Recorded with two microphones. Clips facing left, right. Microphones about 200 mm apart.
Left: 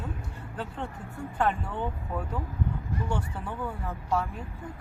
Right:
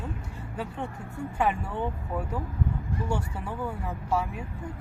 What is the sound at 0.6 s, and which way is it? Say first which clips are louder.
Speech: right 2 dB; 10° right (ahead or behind).